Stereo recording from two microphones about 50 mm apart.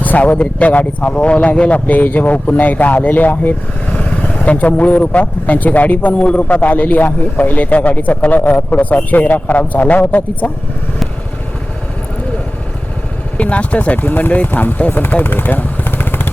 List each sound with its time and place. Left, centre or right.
0.0 s a man's voice: left
13.3 s a man's voice: left